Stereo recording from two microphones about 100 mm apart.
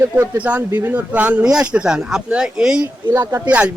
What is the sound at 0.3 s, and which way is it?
Speech, 15° right (ahead or behind).